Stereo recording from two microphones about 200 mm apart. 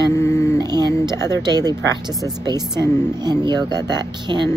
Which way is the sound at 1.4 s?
20° right (ahead or behind).